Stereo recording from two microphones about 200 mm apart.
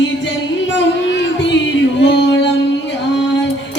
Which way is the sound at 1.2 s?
65° left (ahead or behind).